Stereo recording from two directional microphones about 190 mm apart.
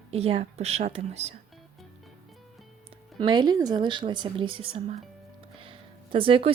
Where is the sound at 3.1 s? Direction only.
25° right (ahead or behind).